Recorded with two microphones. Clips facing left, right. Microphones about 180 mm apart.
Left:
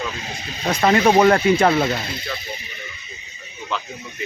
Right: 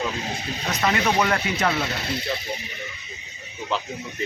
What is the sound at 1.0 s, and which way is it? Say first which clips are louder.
Speech: left 10 dB; 55° left (ahead or behind).